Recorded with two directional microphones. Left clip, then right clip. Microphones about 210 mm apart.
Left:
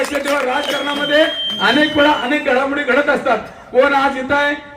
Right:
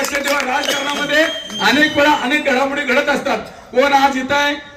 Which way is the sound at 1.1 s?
55° left (ahead or behind).